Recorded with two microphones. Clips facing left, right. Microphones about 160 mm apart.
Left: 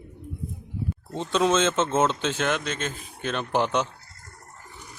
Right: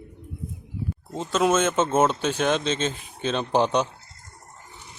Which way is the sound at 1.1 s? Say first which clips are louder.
Right 1 dB; 5° right (ahead or behind).